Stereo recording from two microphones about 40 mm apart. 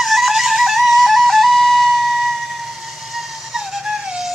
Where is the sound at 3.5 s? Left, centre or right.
Centre.